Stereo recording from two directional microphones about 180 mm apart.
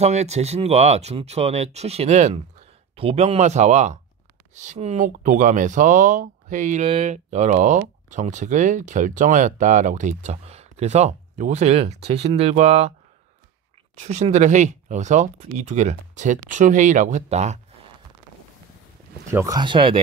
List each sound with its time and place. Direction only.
0.0 s speech: 40° right (ahead or behind)
13.9 s speech: 40° right (ahead or behind)
19.3 s speech: 20° right (ahead or behind)